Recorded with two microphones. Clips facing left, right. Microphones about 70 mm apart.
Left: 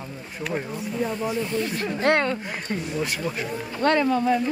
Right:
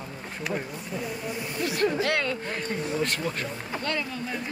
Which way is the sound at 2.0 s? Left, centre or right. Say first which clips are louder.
Left 5 dB; left.